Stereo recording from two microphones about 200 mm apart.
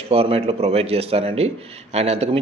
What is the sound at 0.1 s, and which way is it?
A man's voice, 30° right (ahead or behind).